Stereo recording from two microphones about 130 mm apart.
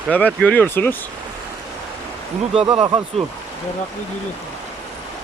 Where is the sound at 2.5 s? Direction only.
45° right (ahead or behind).